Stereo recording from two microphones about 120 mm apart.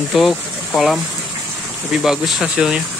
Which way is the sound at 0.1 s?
Centre (ahead or behind).